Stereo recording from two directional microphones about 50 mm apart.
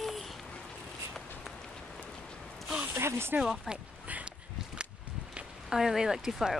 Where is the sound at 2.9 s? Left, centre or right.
Right.